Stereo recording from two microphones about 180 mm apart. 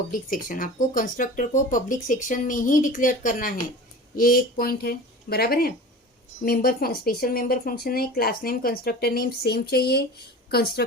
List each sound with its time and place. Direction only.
0.1 s speech: 50° left (ahead or behind)